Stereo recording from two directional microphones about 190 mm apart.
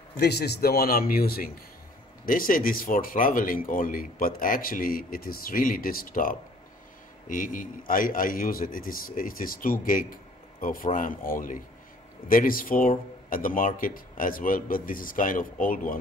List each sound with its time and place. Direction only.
0.2 s speech: 60° left (ahead or behind)